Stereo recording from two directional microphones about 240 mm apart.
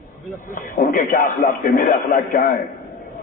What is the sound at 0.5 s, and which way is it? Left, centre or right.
A man's voice, left.